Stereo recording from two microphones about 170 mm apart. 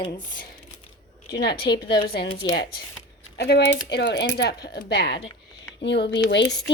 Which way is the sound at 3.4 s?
70° left (ahead or behind).